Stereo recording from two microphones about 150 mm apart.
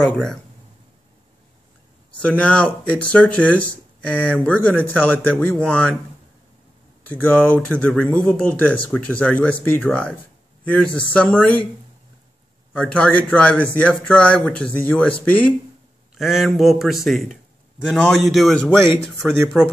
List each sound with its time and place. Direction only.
0.0 s a man's voice: 5° left (ahead or behind)
2.2 s speech: 10° left (ahead or behind)
7.1 s speech: 10° left (ahead or behind)
12.7 s speech: 10° left (ahead or behind)
16.2 s a man's voice: centre (ahead or behind)
19.2 s speech: 15° right (ahead or behind)